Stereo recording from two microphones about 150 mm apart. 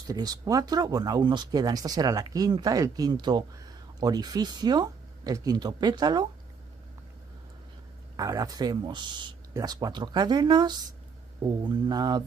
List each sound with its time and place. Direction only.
0.0 s speech: 25° right (ahead or behind)
8.2 s speech: 25° right (ahead or behind)